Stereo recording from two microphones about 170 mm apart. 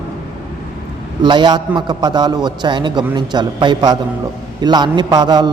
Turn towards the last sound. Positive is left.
turn(degrees=-25)  # may be behind; listen again after turning